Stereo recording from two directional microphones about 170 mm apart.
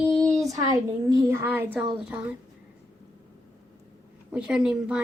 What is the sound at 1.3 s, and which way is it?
Speech, 15° right (ahead or behind).